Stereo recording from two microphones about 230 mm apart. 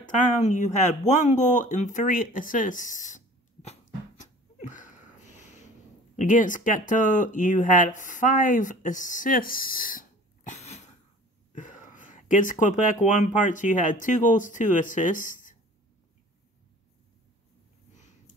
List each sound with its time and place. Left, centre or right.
0.0 s speech: left
4.2 s a sound: left
6.1 s speech: left